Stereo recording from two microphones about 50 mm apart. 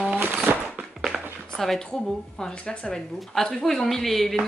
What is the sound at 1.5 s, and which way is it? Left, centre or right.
Speech, centre.